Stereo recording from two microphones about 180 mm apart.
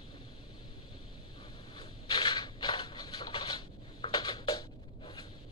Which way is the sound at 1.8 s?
25° left (ahead or behind).